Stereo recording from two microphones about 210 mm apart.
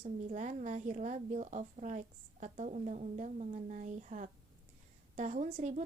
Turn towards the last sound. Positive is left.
turn(degrees=-35)  # may be behind; listen again after turning